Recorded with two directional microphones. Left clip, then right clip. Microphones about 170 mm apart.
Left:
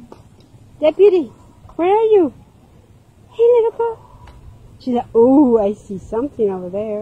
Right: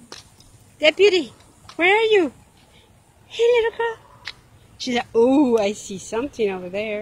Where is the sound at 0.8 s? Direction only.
5° right (ahead or behind).